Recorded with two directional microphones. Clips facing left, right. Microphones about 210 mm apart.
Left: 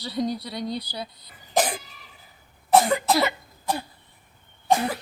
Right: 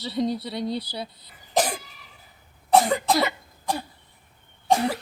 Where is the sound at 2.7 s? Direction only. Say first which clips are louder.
Even; 5° left (ahead or behind).